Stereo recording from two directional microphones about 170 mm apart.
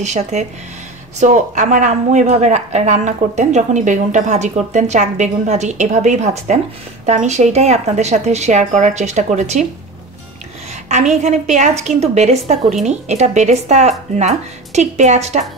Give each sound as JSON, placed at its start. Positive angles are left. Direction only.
{"t": 0.0, "sound": "a woman's voice", "side_deg": -40}
{"t": 10.9, "sound": "a woman's voice", "side_deg": -45}